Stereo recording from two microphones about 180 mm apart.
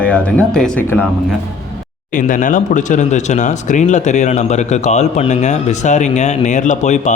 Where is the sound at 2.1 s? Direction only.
45° left (ahead or behind).